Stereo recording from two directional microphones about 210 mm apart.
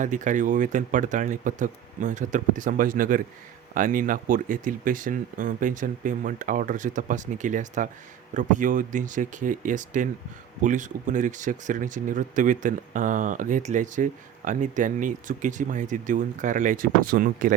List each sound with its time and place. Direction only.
0.0 s speech: 35° right (ahead or behind)